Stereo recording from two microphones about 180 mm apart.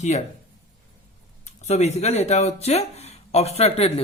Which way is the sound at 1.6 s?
35° left (ahead or behind).